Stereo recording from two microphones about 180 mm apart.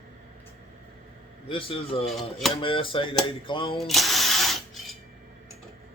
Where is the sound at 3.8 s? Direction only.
Centre (ahead or behind).